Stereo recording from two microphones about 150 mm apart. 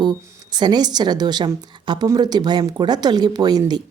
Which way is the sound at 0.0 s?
30° right (ahead or behind).